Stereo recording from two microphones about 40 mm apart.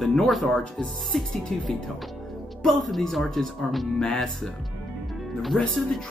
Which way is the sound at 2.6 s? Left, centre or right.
Centre.